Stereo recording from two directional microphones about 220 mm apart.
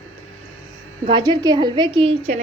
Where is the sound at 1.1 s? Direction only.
20° right (ahead or behind).